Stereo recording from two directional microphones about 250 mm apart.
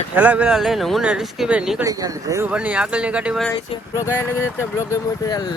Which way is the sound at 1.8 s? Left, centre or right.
Centre.